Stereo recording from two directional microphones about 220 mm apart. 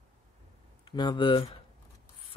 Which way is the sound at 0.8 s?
20° left (ahead or behind).